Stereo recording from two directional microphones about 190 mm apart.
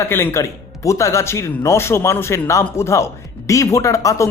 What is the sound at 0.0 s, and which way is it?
Speech, 15° left (ahead or behind).